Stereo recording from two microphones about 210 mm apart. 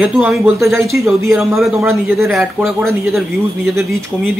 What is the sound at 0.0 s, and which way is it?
Speech, centre (ahead or behind).